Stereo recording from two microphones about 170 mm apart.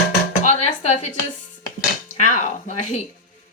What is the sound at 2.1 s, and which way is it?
Speech, 45° left (ahead or behind).